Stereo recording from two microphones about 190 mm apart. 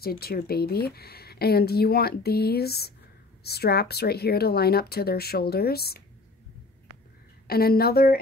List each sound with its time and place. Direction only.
0.0 s speech: 55° left (ahead or behind)
7.4 s a woman's voice: 55° left (ahead or behind)